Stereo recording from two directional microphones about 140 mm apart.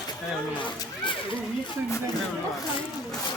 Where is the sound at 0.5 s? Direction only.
35° left (ahead or behind).